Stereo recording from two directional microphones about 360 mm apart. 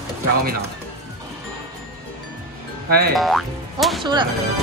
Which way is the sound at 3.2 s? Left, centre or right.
Centre.